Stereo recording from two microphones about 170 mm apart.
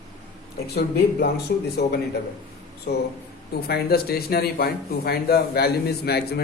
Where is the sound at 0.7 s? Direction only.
70° left (ahead or behind).